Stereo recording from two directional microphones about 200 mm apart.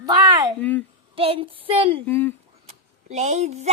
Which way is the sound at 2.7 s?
35° right (ahead or behind).